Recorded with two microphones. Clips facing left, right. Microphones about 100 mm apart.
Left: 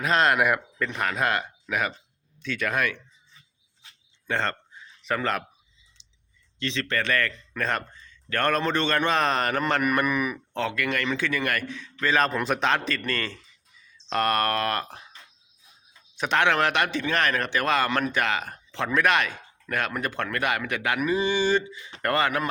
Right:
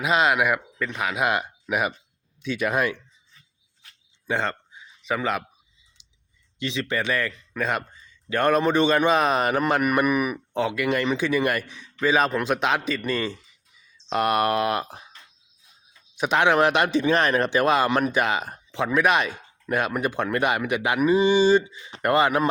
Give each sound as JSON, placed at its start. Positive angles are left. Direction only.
{"t": 0.0, "sound": "speech", "side_deg": -5}
{"t": 4.3, "sound": "a sound", "side_deg": -5}
{"t": 6.0, "sound": "clicking", "side_deg": -10}
{"t": 6.6, "sound": "speech", "side_deg": -10}
{"t": 16.1, "sound": "speech", "side_deg": -10}